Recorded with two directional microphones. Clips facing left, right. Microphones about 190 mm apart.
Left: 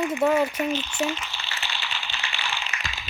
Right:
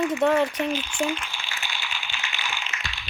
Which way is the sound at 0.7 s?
10° right (ahead or behind).